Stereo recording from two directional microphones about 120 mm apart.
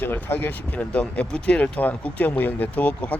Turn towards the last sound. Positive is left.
turn(degrees=10)  # may be behind; listen again after turning